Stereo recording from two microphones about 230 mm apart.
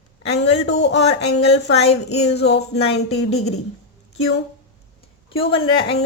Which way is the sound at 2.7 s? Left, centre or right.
Left.